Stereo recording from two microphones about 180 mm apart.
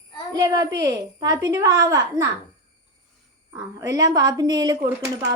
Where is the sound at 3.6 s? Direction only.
20° right (ahead or behind).